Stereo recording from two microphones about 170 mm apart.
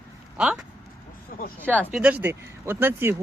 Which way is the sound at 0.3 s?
5° right (ahead or behind).